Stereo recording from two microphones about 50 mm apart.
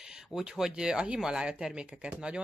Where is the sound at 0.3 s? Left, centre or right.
Centre.